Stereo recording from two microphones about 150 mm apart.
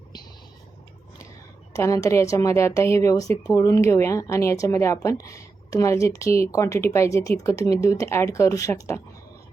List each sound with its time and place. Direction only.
1.7 s speech: 20° left (ahead or behind)